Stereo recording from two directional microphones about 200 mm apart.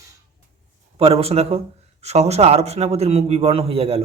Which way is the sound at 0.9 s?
30° right (ahead or behind).